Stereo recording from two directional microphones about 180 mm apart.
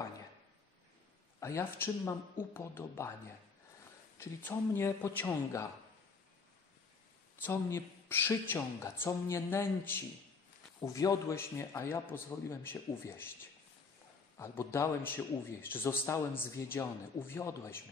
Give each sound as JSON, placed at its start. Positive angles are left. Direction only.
{"t": 1.4, "sound": "a man's voice", "side_deg": 15}
{"t": 4.2, "sound": "a man's voice", "side_deg": 10}
{"t": 7.4, "sound": "a man's voice", "side_deg": 10}
{"t": 14.3, "sound": "a man's voice", "side_deg": 15}